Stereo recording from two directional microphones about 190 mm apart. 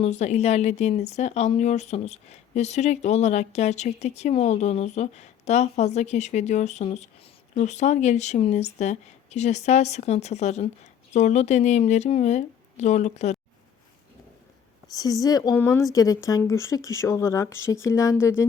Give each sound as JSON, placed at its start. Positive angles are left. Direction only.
{"t": 0.0, "sound": "speech", "side_deg": 35}
{"t": 14.9, "sound": "speech", "side_deg": 20}